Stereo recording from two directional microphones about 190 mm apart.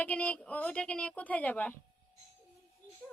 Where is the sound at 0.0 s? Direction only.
5° left (ahead or behind).